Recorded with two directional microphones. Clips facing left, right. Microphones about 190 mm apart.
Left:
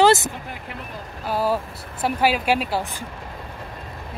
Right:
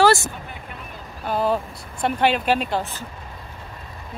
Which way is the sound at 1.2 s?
5° left (ahead or behind).